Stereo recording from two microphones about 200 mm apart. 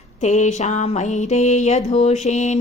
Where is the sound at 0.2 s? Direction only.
35° left (ahead or behind).